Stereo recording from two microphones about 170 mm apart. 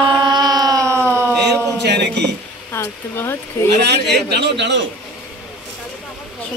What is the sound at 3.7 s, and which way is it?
A man's voice, 75° right (ahead or behind).